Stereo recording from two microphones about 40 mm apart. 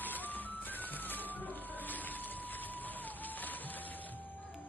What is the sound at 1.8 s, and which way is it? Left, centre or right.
Vehicle, left.